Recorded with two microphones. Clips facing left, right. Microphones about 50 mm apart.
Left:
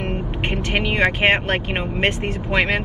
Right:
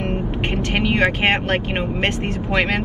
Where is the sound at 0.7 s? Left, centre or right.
Left.